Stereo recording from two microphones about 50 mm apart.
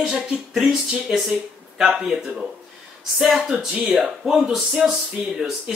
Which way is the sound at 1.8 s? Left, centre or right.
Centre.